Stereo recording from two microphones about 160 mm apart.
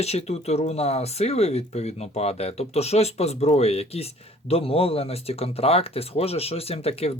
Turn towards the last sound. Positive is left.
turn(degrees=40)  # may be behind; listen again after turning